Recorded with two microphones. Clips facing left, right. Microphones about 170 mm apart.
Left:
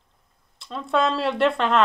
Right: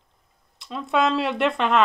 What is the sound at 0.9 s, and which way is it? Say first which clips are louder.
Speech: even; centre (ahead or behind).